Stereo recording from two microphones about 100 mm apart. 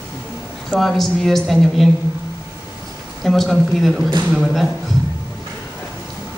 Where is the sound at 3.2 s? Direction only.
Centre (ahead or behind).